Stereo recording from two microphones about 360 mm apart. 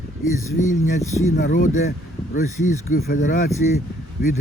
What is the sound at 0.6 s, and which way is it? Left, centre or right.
Speech, left.